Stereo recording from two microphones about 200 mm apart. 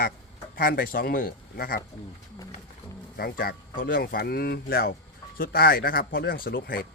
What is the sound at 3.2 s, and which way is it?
Speech, 50° left (ahead or behind).